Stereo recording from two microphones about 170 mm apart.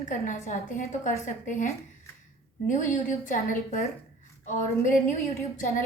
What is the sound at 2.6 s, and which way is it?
A woman's voice, 50° left (ahead or behind).